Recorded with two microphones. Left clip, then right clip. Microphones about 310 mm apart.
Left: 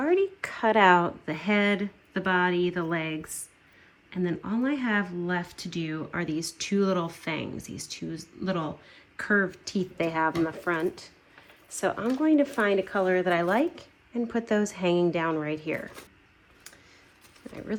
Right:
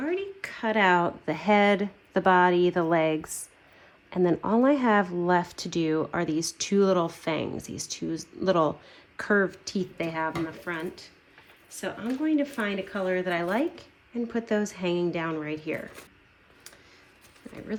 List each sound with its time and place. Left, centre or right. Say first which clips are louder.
0.0 s a woman's voice: left 6 dB; centre
17.4 s speech: left 1 dB; centre